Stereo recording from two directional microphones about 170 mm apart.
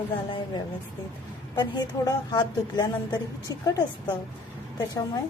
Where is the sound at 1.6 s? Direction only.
25° left (ahead or behind).